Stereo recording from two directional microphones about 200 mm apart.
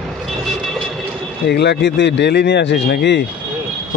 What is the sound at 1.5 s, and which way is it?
Speech, 55° left (ahead or behind).